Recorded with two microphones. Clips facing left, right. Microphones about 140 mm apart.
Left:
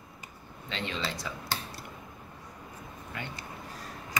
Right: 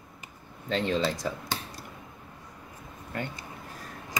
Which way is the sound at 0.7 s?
45° right (ahead or behind).